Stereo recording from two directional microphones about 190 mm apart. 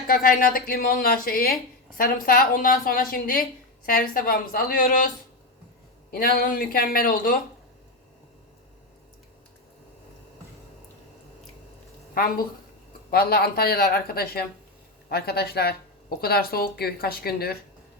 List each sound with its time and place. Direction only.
0.1 s speech: 50° left (ahead or behind)
13.1 s speech: 55° left (ahead or behind)